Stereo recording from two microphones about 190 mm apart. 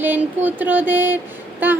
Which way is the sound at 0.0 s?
10° right (ahead or behind).